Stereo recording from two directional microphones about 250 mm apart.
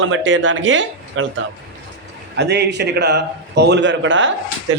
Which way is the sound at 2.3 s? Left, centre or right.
Right.